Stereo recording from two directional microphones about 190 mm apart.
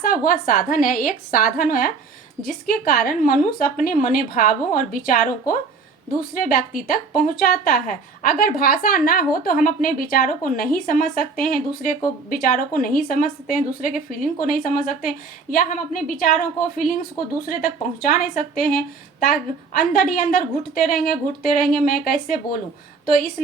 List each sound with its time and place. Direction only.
0.0 s a woman's voice: 45° left (ahead or behind)